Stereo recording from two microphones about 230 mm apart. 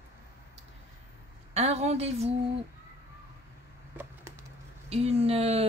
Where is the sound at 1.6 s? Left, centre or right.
Right.